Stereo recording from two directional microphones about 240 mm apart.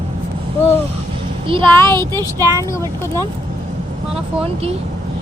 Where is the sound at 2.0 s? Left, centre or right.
Centre.